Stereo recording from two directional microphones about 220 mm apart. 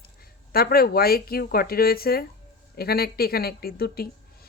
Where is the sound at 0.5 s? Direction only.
45° left (ahead or behind).